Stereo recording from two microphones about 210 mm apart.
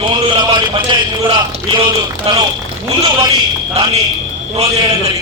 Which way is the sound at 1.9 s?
20° right (ahead or behind).